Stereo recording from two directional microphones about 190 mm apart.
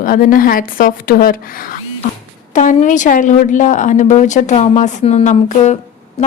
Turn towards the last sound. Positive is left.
turn(degrees=40)  # may be behind; listen again after turning